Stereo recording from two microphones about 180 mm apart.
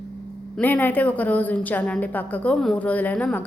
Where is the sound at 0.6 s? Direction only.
10° left (ahead or behind).